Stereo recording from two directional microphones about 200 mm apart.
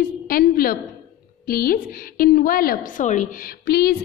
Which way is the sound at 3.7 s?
50° left (ahead or behind).